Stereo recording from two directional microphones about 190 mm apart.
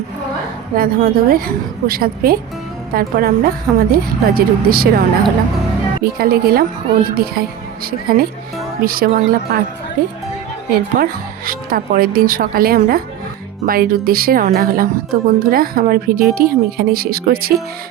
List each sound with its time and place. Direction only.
0.8 s a woman's voice: 50° right (ahead or behind)
10.7 s a woman's voice: 50° right (ahead or behind)